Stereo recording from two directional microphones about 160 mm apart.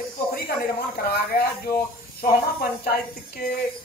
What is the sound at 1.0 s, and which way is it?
Speech, 75° left (ahead or behind).